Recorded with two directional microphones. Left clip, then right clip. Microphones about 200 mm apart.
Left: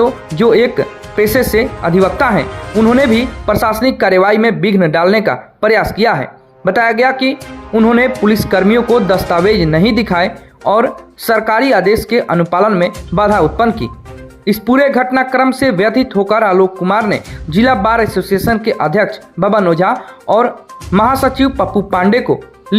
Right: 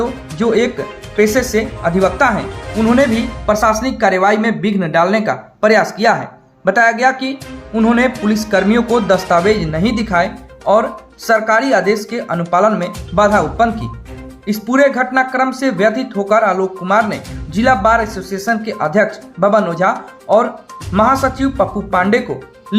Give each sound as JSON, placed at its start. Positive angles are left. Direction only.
{"t": 0.0, "sound": "speech", "side_deg": 40}